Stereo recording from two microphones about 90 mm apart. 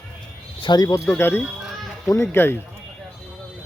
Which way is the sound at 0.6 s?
50° left (ahead or behind).